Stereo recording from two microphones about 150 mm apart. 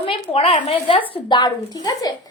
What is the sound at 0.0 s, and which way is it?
A woman's voice, 40° left (ahead or behind).